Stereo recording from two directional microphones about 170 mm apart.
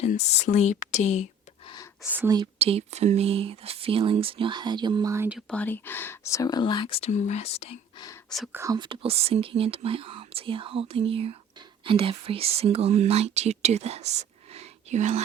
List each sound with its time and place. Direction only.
0.0 s speech: 40° left (ahead or behind)
1.6 s a sound: 20° left (ahead or behind)
2.1 s a woman's voice: 15° right (ahead or behind)
2.6 s speech: 35° right (ahead or behind); by 5.4 s 15° right (ahead or behind)
5.5 s speech: 10° left (ahead or behind); by 7.1 s 30° left (ahead or behind)
7.1 s speech: 45° left (ahead or behind)
8.5 s speech: 20° right (ahead or behind); by 15.2 s 40° right (ahead or behind)